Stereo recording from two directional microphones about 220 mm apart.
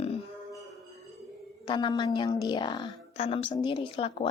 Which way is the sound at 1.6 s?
20° left (ahead or behind).